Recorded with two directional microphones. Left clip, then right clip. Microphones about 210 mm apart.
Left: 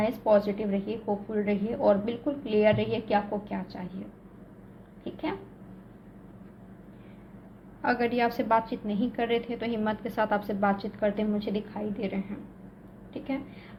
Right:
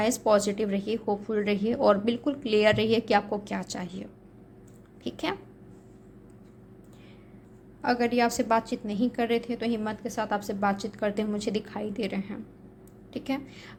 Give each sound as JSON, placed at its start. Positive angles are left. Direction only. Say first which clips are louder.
{"t": 0.0, "sound": "a woman's voice", "louder": "even", "side_deg": -45}
{"t": 5.0, "sound": "a woman's voice", "louder": "right 2 dB", "side_deg": -40}
{"t": 7.8, "sound": "a woman's voice", "louder": "right 1 dB", "side_deg": -20}